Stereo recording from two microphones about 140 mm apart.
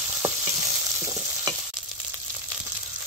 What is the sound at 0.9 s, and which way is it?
Stir, 15° right (ahead or behind).